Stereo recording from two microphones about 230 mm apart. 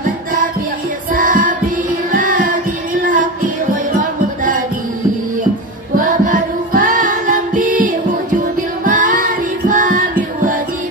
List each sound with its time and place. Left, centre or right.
1.1 s music: right
5.9 s music: right